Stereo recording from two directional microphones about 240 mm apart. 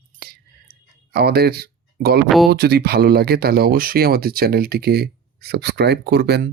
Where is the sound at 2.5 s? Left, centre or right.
Right.